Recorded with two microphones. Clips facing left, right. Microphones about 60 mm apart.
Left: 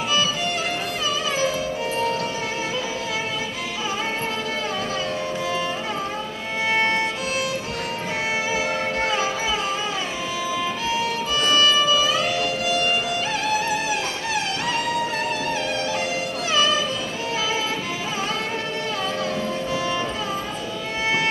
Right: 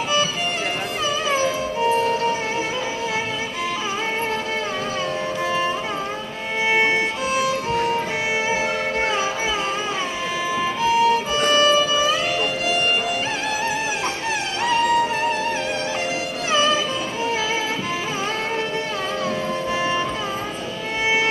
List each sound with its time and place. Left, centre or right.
1.3 s music: right
6.7 s violin: right
9.0 s music: right
10.6 s music: right